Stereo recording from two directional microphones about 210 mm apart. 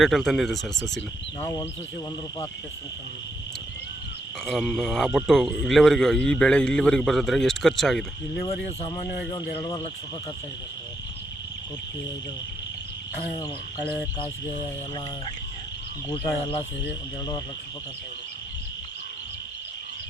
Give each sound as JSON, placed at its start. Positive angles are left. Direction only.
{"t": 0.0, "sound": "speech", "side_deg": 0}
{"t": 4.4, "sound": "speech", "side_deg": 0}
{"t": 16.0, "sound": "speech", "side_deg": 25}